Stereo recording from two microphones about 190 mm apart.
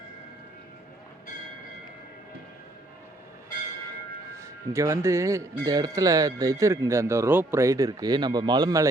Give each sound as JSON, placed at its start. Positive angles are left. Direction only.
{"t": 4.4, "sound": "speech", "side_deg": -15}